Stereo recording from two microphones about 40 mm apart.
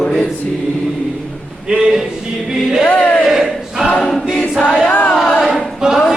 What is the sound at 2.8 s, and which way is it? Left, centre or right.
Choir, left.